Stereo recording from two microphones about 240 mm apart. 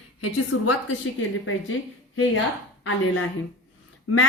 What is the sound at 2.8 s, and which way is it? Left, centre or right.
Speech, left.